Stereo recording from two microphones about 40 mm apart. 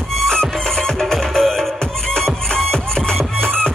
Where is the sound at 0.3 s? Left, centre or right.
Centre.